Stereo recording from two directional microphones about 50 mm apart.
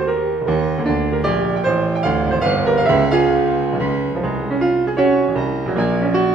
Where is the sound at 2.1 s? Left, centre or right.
Right.